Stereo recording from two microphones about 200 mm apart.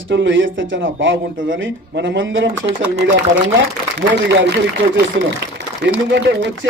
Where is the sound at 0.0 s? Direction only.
65° right (ahead or behind).